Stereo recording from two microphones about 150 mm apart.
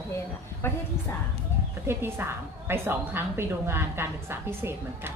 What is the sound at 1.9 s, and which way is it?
A woman's voice, 15° right (ahead or behind).